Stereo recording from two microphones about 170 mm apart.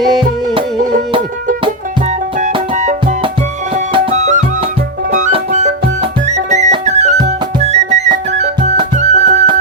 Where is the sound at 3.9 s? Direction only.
40° right (ahead or behind).